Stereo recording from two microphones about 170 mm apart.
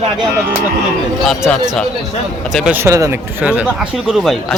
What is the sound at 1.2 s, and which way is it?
Speech, 5° left (ahead or behind).